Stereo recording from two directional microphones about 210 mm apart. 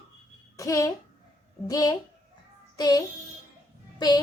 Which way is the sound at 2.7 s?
20° left (ahead or behind).